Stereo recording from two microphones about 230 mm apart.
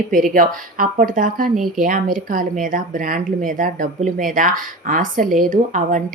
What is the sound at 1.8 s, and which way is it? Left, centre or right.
Speech, right.